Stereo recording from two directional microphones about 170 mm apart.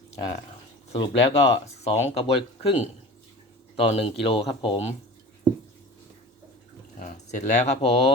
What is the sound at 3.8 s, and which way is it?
Speech, 35° left (ahead or behind).